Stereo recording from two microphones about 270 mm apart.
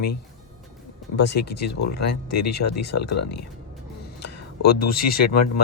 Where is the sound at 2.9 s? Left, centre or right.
Left.